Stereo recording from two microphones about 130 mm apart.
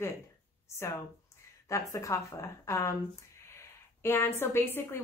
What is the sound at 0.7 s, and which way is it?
A woman's voice, 15° left (ahead or behind).